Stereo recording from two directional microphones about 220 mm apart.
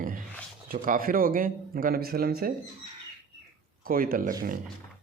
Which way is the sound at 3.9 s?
40° right (ahead or behind).